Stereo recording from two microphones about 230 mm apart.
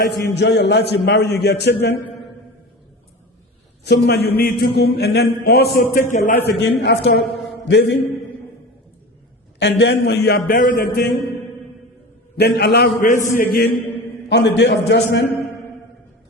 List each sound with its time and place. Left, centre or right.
0.0 s a man's voice: left
3.8 s a man's voice: left
9.6 s a man's voice: left
12.4 s a man's voice: left
13.0 s a man's voice: left